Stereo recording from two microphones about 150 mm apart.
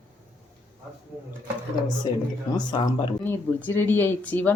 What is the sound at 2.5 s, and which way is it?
Speech, 30° left (ahead or behind).